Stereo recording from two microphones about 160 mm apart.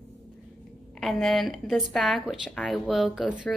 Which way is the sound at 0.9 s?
Centre (ahead or behind).